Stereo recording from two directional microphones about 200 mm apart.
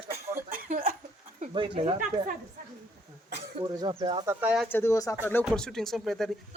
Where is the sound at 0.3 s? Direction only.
45° right (ahead or behind).